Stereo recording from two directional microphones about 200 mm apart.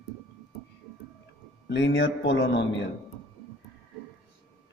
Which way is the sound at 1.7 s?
65° left (ahead or behind).